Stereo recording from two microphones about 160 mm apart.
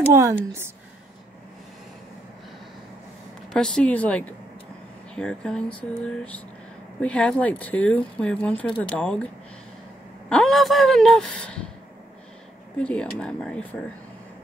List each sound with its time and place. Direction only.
0.1 s a woman's voice: 20° right (ahead or behind)
3.5 s speech: 5° left (ahead or behind)
10.3 s speech: centre (ahead or behind)
12.7 s speech: 5° left (ahead or behind)